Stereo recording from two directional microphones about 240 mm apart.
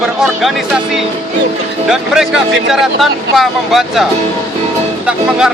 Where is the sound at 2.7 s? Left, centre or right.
Centre.